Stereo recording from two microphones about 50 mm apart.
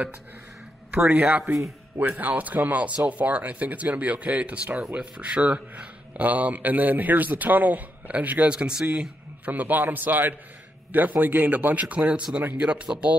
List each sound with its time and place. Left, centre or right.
0.9 s speech: right
9.5 s speech: right